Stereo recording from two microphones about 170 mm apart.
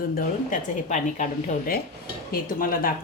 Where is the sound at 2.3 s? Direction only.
55° left (ahead or behind).